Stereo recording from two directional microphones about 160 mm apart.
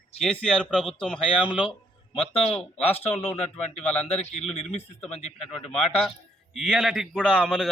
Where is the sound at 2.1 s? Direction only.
40° left (ahead or behind).